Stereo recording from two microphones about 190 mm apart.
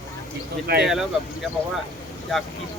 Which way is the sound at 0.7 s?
55° right (ahead or behind).